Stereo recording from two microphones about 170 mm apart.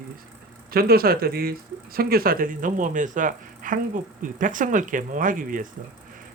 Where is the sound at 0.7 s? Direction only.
60° right (ahead or behind).